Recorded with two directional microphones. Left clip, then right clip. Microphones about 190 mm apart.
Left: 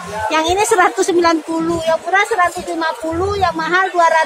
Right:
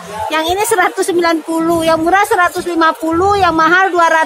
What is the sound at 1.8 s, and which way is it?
Speech, 30° right (ahead or behind).